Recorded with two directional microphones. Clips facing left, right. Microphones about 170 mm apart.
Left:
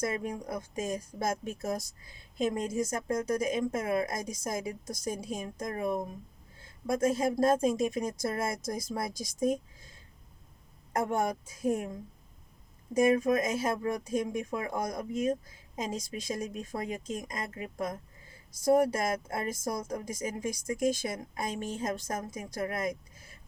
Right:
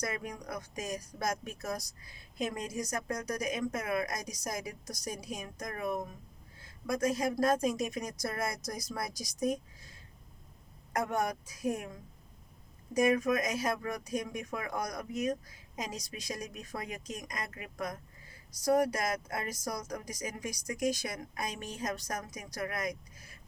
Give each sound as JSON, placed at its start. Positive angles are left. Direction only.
{"t": 0.0, "sound": "speech", "side_deg": 25}
{"t": 10.9, "sound": "speech", "side_deg": 25}
{"t": 12.9, "sound": "speech", "side_deg": 25}